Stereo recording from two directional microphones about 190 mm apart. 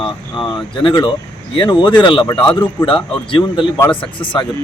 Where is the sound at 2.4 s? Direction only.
15° left (ahead or behind).